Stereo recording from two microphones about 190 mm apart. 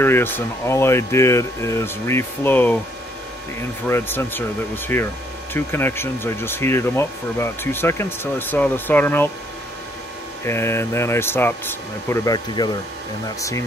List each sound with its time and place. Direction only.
0.0 s speech: 10° left (ahead or behind)
3.8 s speech: 10° left (ahead or behind)
10.4 s speech: 15° left (ahead or behind)